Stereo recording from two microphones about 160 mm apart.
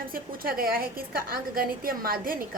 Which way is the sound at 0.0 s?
65° right (ahead or behind).